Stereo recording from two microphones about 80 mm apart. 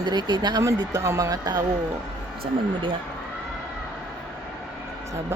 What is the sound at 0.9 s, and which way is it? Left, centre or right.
Speech, right.